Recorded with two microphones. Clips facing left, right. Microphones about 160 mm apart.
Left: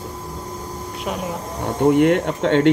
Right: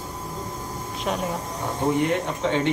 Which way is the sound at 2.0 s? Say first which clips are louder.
Left 7 dB; 65° left (ahead or behind).